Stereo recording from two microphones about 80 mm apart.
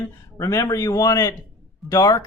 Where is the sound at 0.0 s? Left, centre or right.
Left.